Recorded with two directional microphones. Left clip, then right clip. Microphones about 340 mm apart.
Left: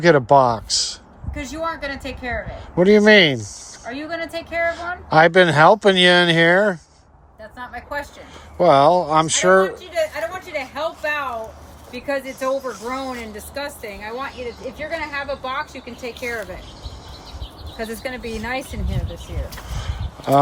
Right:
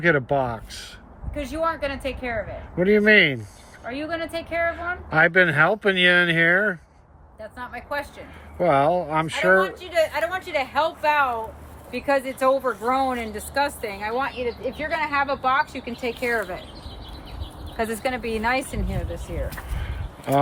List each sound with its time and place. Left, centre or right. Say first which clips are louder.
0.3 s speech: left 10 dB; centre
1.6 s speech: right 1 dB; centre
9.9 s speech: right 1 dB; centre
17.7 s speech: right 3 dB; centre